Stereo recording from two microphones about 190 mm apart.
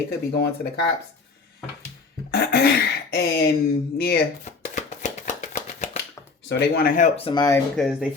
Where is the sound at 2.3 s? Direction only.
55° left (ahead or behind).